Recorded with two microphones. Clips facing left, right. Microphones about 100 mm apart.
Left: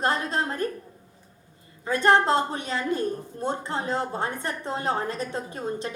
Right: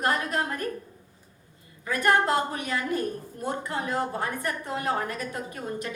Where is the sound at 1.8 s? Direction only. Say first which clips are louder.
Left 3 dB; 30° left (ahead or behind).